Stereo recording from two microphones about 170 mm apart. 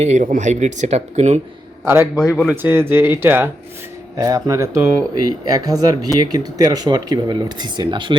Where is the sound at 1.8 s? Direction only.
10° right (ahead or behind).